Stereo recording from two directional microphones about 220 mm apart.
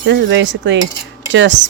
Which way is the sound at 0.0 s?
55° right (ahead or behind).